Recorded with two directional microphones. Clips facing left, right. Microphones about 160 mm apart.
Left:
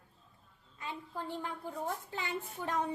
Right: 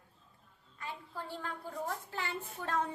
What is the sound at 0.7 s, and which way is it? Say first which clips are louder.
A woman's voice: left 2 dB; 20° left (ahead or behind).